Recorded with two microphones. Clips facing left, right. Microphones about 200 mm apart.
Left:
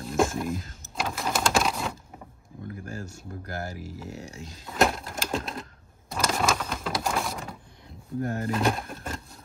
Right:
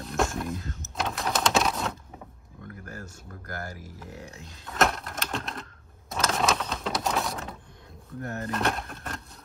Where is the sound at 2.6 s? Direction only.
25° left (ahead or behind).